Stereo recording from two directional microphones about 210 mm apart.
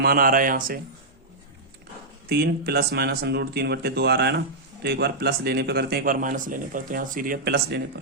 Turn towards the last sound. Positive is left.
turn(degrees=-50)  # may be behind; listen again after turning